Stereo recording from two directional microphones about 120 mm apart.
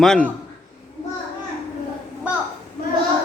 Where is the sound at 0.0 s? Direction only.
5° left (ahead or behind).